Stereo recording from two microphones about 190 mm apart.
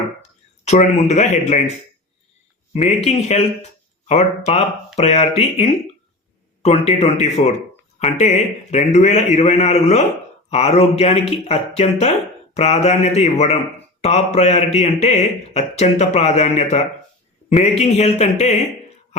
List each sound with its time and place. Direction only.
0.2 s speech: 35° left (ahead or behind)
2.7 s a man's voice: 35° left (ahead or behind)